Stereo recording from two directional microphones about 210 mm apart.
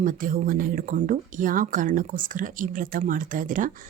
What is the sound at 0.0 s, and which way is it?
Speech, 40° right (ahead or behind).